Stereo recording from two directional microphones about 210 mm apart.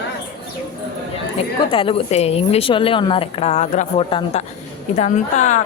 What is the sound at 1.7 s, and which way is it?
A woman's voice, 25° left (ahead or behind).